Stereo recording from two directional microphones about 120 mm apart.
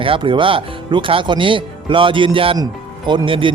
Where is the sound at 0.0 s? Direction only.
45° right (ahead or behind).